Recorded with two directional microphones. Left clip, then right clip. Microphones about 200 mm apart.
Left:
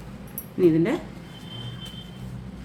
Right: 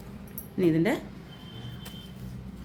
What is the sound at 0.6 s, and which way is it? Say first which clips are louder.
Speech: left 5 dB; 40° right (ahead or behind).